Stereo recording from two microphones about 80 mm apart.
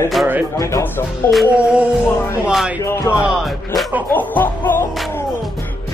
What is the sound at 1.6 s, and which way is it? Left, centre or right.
Speech, centre.